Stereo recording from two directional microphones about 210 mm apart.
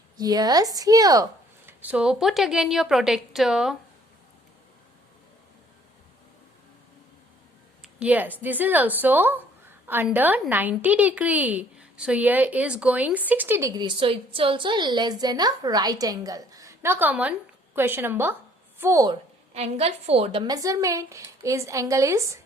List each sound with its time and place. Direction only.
0.2 s speech: 20° right (ahead or behind); by 3.8 s centre (ahead or behind)
7.8 s a sound: 5° right (ahead or behind)
8.4 s a woman's voice: 10° right (ahead or behind)
19.5 s a woman's voice: 30° right (ahead or behind); by 22.2 s 15° right (ahead or behind)